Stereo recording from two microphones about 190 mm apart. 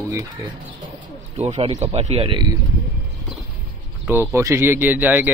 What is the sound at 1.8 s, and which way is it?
Speech, 35° right (ahead or behind).